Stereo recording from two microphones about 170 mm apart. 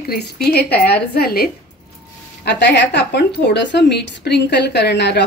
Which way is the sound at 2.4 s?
90° left.